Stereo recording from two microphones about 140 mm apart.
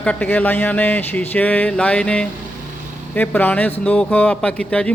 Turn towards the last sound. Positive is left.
turn(degrees=5)  # may be behind; listen again after turning